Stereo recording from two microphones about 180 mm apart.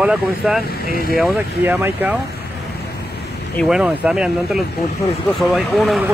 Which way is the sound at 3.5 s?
Centre (ahead or behind).